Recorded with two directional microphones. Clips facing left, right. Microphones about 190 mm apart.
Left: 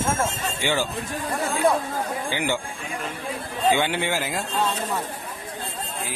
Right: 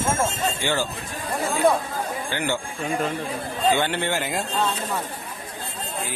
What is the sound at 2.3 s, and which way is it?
Speech, 15° left (ahead or behind).